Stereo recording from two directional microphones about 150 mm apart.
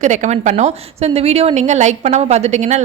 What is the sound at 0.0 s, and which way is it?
A woman's voice, 55° right (ahead or behind).